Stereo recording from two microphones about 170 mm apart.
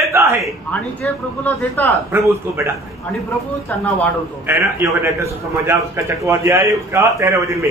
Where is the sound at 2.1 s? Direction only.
15° right (ahead or behind).